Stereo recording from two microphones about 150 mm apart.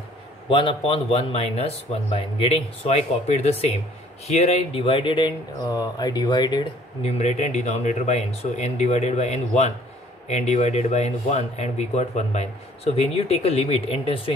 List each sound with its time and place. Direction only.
0.5 s speech: 35° left (ahead or behind)
7.0 s speech: 45° left (ahead or behind)